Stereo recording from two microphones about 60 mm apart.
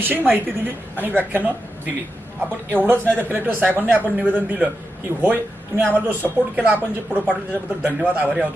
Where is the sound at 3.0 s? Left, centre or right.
Left.